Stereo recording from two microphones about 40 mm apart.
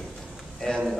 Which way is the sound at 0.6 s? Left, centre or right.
Left.